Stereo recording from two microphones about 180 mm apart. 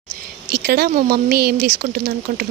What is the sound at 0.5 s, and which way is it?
Speech, 60° right (ahead or behind).